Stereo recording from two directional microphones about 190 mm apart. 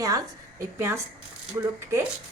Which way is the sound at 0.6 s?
15° right (ahead or behind).